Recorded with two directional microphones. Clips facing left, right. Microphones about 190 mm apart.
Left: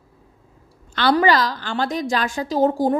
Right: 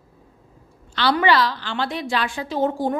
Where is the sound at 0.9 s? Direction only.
45° left (ahead or behind).